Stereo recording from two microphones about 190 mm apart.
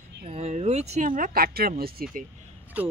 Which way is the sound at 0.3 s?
35° right (ahead or behind).